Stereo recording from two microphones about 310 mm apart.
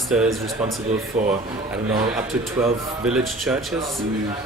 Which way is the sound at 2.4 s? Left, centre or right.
Centre.